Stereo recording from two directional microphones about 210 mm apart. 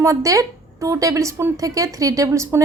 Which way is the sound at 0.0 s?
15° right (ahead or behind).